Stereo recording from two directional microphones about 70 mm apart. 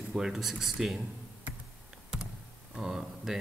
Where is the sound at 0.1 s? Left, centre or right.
Centre.